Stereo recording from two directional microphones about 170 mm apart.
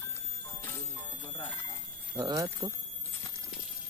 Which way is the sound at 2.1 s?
20° right (ahead or behind).